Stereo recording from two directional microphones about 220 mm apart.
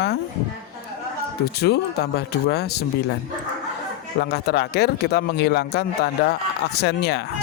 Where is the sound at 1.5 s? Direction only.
45° left (ahead or behind).